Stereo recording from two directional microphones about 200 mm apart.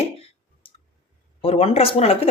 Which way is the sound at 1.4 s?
30° left (ahead or behind).